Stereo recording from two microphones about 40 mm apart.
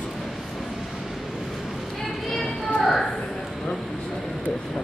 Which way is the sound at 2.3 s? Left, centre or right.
Centre.